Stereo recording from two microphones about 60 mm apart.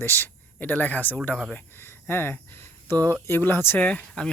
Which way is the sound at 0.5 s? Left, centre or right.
Left.